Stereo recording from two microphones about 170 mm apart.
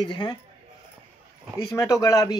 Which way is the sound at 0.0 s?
25° left (ahead or behind).